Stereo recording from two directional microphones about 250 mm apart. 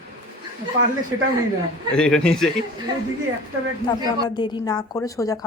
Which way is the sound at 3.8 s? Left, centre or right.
Centre.